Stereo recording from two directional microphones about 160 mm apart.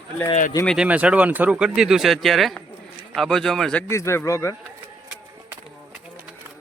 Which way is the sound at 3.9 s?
15° left (ahead or behind).